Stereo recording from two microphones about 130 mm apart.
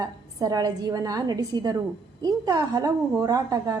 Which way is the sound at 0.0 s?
30° right (ahead or behind).